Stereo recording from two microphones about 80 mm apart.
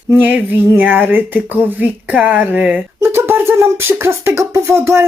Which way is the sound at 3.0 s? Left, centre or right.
Right.